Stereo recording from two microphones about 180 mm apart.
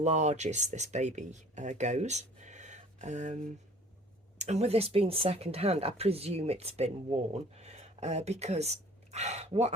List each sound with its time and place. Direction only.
0.0 s speech: 40° right (ahead or behind)
4.4 s speech: 40° right (ahead or behind)